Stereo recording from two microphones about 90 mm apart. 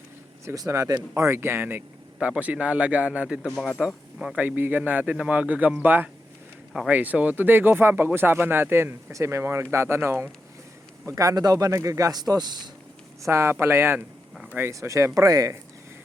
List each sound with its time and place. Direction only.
0.4 s speech: 40° right (ahead or behind)
2.2 s a man's voice: 15° right (ahead or behind)
4.4 s speech: 20° right (ahead or behind)
11.0 s speech: 40° right (ahead or behind)
12.3 s speech: 50° right (ahead or behind)
13.2 s speech: 30° right (ahead or behind)